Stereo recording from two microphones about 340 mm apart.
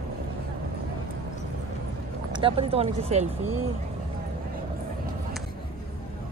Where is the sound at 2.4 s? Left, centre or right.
Centre.